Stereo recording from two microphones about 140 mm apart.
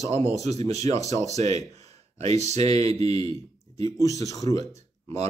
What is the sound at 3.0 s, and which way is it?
Speech, 30° left (ahead or behind).